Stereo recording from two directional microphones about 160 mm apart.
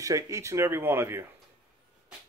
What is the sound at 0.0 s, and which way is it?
Speech, 20° right (ahead or behind).